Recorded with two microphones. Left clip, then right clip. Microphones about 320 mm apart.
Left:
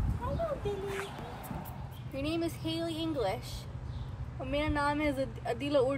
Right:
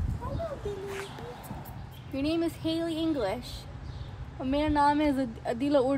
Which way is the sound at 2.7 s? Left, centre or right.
Right.